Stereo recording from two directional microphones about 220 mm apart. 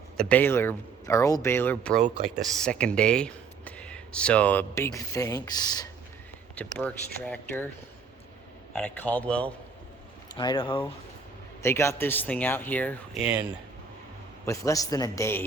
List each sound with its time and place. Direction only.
0.2 s speech: 5° left (ahead or behind)
8.7 s speech: 10° left (ahead or behind)
10.3 s speech: 20° left (ahead or behind)
11.6 s speech: 10° left (ahead or behind)
13.2 s speech: 5° right (ahead or behind)
14.4 s speech: 15° left (ahead or behind)